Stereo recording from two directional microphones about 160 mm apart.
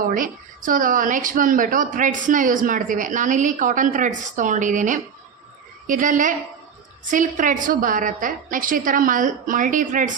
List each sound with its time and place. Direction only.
0.1 s a woman's voice: 60° right (ahead or behind)